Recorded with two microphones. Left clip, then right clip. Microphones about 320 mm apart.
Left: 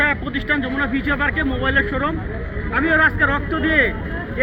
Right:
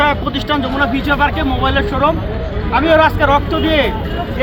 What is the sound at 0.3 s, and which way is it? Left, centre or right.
Speech, centre.